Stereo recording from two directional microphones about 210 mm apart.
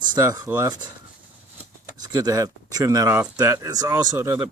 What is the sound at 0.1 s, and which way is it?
Speech, 20° right (ahead or behind).